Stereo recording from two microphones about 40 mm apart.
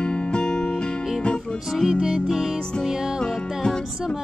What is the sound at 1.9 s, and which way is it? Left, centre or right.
Music, centre.